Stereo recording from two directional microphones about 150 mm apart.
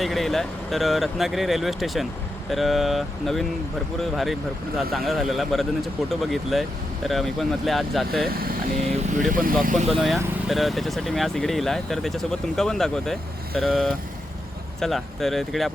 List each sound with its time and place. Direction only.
0.0 s speech: centre (ahead or behind)
4.9 s speech: centre (ahead or behind)
8.3 s speech: 80° right
8.9 s speech: 55° right (ahead or behind)
9.9 s speech: centre (ahead or behind)